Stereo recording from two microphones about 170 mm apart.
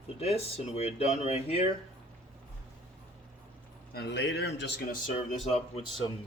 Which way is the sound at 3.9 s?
80° left.